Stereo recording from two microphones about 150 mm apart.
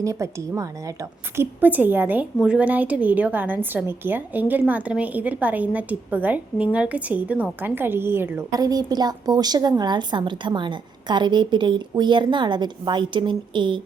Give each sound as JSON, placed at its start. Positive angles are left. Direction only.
{"t": 0.0, "sound": "a woman's voice", "side_deg": -20}